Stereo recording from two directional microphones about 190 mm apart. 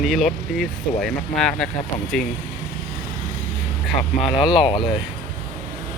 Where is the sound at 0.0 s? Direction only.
Centre (ahead or behind).